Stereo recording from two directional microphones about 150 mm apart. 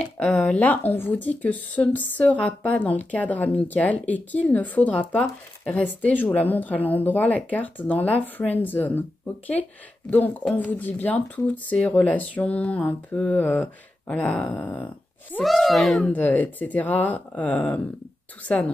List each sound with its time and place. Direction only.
0.0 s a child's voice: 5° left (ahead or behind)
16.1 s speech: 10° left (ahead or behind)